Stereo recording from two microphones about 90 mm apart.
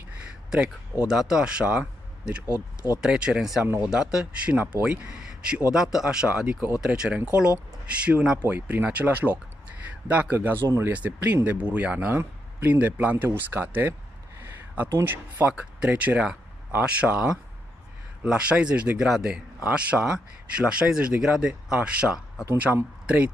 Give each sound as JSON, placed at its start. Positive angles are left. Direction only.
{"t": 0.5, "sound": "speech", "side_deg": -10}
{"t": 3.6, "sound": "speech", "side_deg": -25}
{"t": 3.9, "sound": "speech", "side_deg": -10}
{"t": 5.7, "sound": "speech", "side_deg": -5}